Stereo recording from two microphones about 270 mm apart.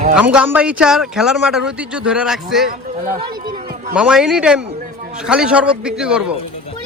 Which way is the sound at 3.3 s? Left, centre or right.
Right.